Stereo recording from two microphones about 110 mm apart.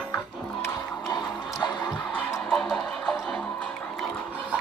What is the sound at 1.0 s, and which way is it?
Music, 35° left (ahead or behind).